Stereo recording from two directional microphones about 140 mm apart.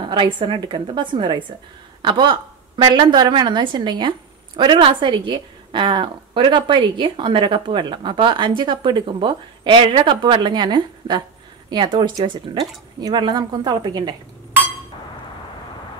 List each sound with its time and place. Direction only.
0.0 s a woman's voice: 35° right (ahead or behind)